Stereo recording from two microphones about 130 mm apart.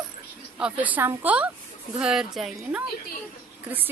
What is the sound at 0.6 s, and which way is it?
A woman's voice, 10° right (ahead or behind).